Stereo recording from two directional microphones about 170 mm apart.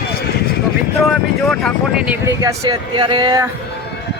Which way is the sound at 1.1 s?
Centre (ahead or behind).